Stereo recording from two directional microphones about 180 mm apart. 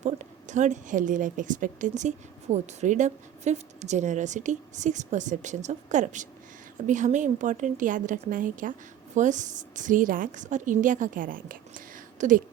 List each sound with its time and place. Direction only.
0.0 s a woman's voice: 40° right (ahead or behind)